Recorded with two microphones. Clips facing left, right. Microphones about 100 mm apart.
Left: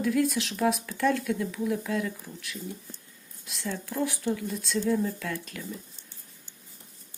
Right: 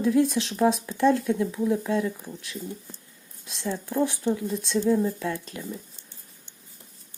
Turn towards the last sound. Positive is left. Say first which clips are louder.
# right 4 dB
turn(degrees=-25)  # may be behind; listen again after turning